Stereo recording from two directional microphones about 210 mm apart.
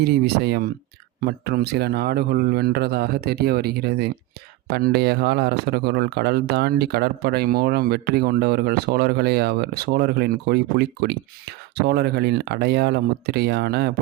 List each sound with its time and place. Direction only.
0.0 s speech: 50° right (ahead or behind)